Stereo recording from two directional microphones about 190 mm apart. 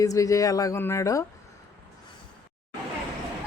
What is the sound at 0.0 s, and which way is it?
A woman's voice, 15° left (ahead or behind).